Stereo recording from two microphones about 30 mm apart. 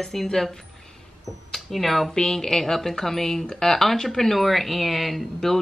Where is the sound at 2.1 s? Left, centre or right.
Left.